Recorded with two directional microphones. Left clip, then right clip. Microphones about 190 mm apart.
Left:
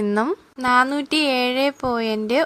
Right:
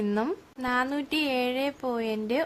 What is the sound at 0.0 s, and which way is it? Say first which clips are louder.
A woman's voice: left 7 dB; 20° left (ahead or behind).